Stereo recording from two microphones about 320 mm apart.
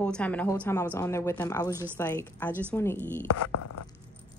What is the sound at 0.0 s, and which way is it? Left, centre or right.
A woman's voice, centre.